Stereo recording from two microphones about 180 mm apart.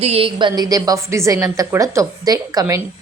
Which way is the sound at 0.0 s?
30° right (ahead or behind).